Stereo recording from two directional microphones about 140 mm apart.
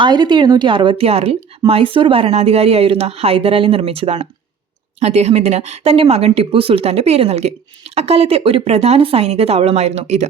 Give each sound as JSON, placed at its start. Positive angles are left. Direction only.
{"t": 0.0, "sound": "speech", "side_deg": -35}